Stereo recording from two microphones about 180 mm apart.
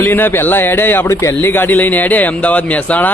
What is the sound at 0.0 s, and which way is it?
Speech, 10° left (ahead or behind).